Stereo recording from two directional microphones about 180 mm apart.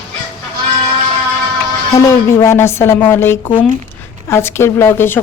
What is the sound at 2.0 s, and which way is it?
Speech, 15° left (ahead or behind).